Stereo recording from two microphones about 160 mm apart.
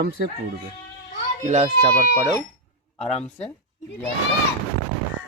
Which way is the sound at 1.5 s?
45° right (ahead or behind).